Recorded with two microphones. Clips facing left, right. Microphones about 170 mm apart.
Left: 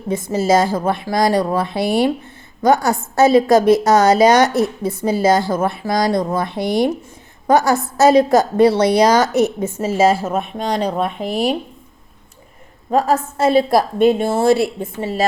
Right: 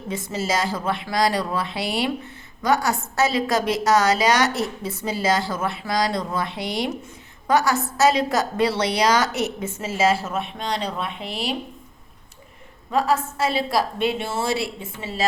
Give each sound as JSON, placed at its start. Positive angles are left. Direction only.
{"t": 0.1, "sound": "a woman's voice", "side_deg": 50}
{"t": 12.9, "sound": "a woman's voice", "side_deg": 45}